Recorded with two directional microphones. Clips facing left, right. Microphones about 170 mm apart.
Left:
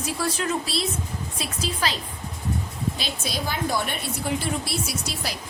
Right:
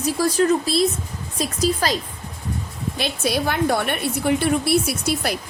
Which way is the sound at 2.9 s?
60° right (ahead or behind).